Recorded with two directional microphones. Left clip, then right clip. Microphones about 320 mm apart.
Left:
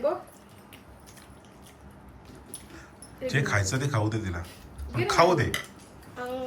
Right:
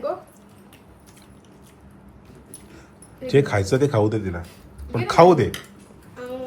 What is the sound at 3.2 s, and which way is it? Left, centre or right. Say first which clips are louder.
Speech: right 8 dB; centre.